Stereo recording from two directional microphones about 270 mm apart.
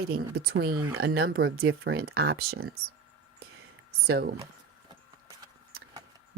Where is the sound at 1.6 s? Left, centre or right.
Right.